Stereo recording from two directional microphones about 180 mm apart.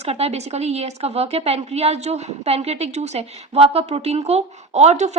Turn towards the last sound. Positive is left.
turn(degrees=-40)  # may be behind; listen again after turning